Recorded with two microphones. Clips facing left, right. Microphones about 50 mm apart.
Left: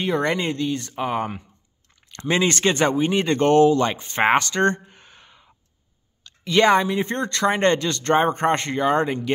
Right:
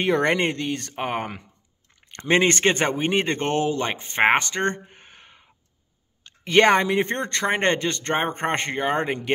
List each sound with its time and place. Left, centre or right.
0.0 s speech: right
3.3 s speech: centre
4.8 s a sound: right
6.2 s speech: right